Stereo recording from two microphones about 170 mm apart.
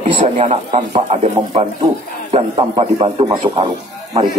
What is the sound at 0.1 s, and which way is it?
A man's voice, 35° right (ahead or behind).